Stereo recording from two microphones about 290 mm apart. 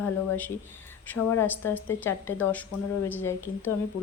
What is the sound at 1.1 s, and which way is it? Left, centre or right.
A woman's voice, centre.